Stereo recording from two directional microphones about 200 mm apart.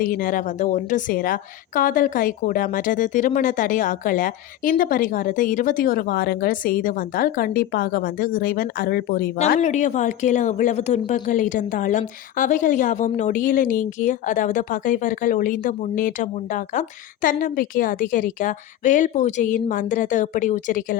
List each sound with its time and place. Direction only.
0.0 s a woman's voice: 45° left (ahead or behind)
9.5 s a woman's voice: 35° left (ahead or behind)